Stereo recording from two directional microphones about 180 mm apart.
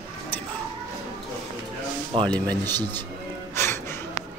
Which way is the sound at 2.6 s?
20° right (ahead or behind).